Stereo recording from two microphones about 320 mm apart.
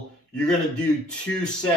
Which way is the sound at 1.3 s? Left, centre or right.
Left.